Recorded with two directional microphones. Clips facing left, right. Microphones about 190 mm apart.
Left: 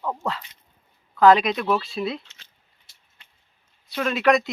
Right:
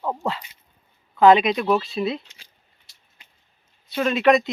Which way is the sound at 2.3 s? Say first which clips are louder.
Right 2 dB; 15° right (ahead or behind).